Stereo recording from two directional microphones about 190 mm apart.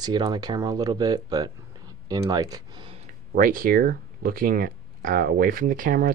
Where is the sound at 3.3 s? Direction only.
45° right (ahead or behind).